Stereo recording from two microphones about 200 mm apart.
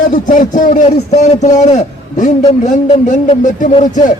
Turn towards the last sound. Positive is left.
turn(degrees=35)  # may be behind; listen again after turning